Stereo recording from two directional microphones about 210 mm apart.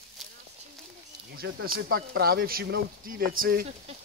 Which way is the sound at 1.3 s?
50° right (ahead or behind).